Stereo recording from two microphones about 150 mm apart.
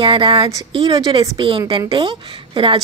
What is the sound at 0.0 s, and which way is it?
A woman's voice, 35° right (ahead or behind).